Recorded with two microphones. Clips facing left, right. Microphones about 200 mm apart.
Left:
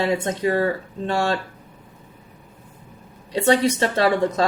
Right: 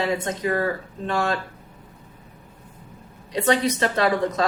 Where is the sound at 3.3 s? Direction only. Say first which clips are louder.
Left 3 dB; 30° left (ahead or behind).